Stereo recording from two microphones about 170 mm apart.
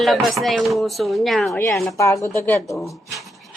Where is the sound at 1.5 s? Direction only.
15° left (ahead or behind).